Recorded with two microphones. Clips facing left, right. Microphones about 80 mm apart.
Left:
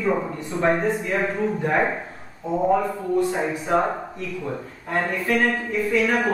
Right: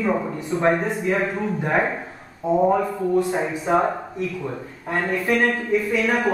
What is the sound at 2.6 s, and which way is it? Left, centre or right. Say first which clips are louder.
Speech: even; centre.